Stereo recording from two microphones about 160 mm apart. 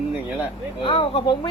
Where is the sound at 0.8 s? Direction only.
35° left (ahead or behind).